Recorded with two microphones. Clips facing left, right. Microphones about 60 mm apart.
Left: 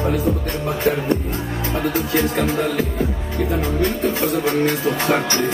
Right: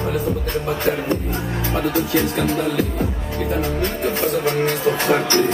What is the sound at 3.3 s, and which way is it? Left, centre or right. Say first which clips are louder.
Speech: left 1 dB; right.